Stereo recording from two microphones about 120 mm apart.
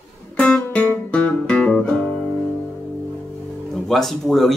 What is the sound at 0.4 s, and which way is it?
Guitar, 10° left (ahead or behind).